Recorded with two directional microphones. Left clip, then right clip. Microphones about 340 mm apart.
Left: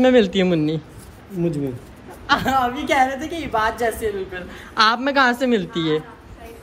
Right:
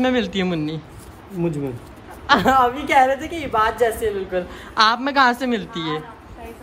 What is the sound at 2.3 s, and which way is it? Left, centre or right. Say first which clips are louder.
Speech: right 3 dB; right.